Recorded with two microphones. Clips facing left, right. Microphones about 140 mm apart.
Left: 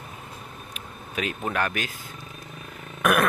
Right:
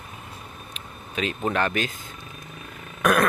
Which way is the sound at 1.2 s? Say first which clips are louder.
Right 2 dB; 5° left (ahead or behind).